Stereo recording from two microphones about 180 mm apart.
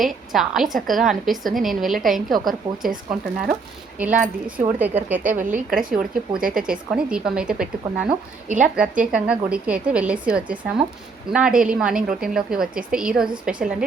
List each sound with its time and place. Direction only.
0.0 s a woman's voice: centre (ahead or behind)
5.3 s a woman's voice: 45° right (ahead or behind)
5.7 s a woman's voice: 5° right (ahead or behind)
6.4 s a woman's voice: 50° right (ahead or behind)
6.7 s a woman's voice: 5° right (ahead or behind)